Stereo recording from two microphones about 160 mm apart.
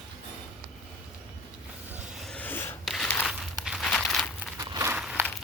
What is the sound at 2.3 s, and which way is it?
Rub, 10° left (ahead or behind).